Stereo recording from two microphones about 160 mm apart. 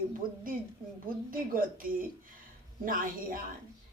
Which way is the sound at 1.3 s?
60° right (ahead or behind).